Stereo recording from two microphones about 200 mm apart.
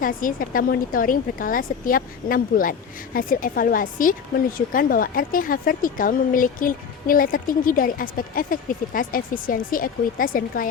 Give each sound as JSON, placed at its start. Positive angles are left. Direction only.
{"t": 0.0, "sound": "speech", "side_deg": 45}